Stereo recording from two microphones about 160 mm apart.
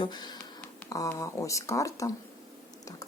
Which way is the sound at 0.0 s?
25° left (ahead or behind).